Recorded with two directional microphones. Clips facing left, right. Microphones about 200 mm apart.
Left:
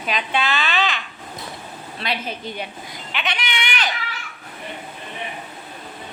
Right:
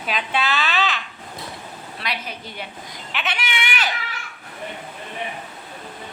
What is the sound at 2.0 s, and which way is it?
Speech, 25° left (ahead or behind).